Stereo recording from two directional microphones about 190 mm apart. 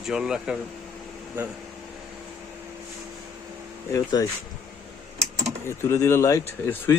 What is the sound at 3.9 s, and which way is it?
Speech, 15° left (ahead or behind).